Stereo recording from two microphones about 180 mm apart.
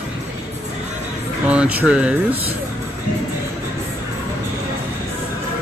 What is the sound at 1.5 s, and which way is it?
Speech, 10° right (ahead or behind).